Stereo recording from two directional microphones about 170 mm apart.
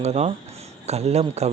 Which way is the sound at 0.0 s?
40° right (ahead or behind).